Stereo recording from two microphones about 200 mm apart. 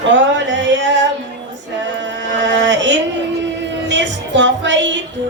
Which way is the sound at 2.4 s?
65° right (ahead or behind).